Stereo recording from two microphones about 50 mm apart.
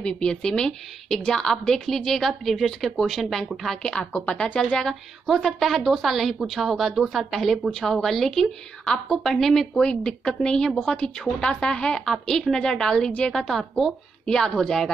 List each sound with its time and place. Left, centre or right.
0.0 s a woman's voice: centre
3.8 s a woman's voice: centre
5.2 s a woman's voice: centre
9.8 s a woman's voice: left; by 13.9 s centre
14.2 s a woman's voice: centre